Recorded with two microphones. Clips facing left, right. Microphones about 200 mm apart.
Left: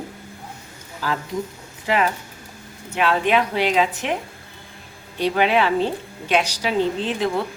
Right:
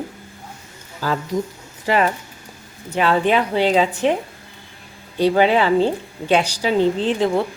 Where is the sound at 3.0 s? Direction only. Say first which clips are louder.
Right 2 dB; 35° right (ahead or behind).